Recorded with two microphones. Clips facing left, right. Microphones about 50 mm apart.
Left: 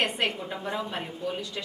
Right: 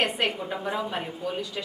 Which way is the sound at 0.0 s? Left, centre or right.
Centre.